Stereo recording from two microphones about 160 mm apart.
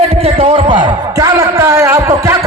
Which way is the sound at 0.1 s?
40° right (ahead or behind).